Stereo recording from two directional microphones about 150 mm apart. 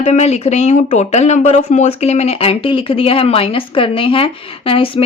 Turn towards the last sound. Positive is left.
turn(degrees=40)  # may be behind; listen again after turning